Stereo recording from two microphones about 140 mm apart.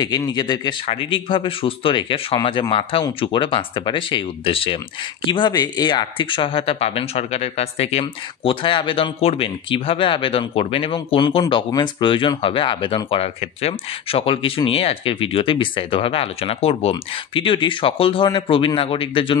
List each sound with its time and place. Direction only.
0.0 s speech: 30° left (ahead or behind)